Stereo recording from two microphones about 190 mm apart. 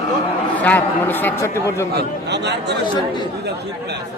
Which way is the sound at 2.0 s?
60° right (ahead or behind).